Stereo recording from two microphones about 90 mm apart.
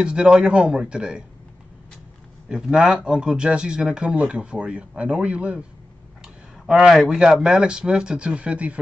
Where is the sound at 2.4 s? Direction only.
10° right (ahead or behind).